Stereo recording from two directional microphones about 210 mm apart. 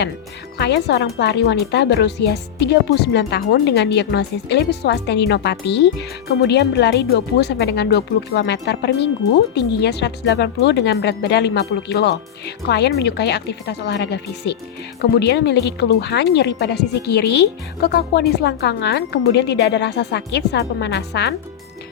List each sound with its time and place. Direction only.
0.6 s a woman's voice: 55° left (ahead or behind)